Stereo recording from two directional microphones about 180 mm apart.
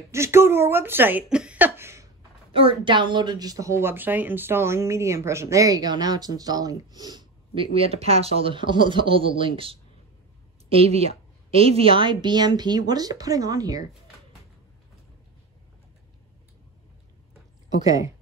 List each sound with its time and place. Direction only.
0.1 s speech: 15° right (ahead or behind)
2.5 s a woman's voice: 30° right (ahead or behind)
17.8 s speech: 20° right (ahead or behind)